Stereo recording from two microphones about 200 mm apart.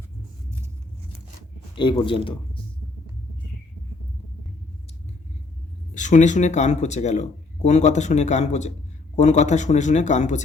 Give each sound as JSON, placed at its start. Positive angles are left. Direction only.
{"t": 1.7, "sound": "speech", "side_deg": 25}
{"t": 5.9, "sound": "speech", "side_deg": 35}